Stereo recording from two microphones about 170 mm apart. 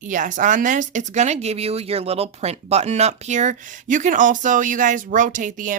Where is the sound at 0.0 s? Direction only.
50° right (ahead or behind).